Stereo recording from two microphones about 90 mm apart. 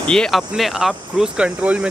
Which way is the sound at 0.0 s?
10° left (ahead or behind).